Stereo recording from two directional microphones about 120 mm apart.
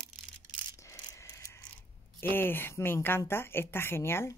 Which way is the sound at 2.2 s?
20° left (ahead or behind).